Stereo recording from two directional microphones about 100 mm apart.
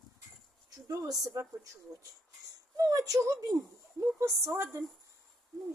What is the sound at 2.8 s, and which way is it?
A woman's voice, 35° right (ahead or behind).